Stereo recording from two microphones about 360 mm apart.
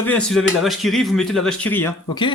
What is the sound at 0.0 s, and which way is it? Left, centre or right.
Speech, centre.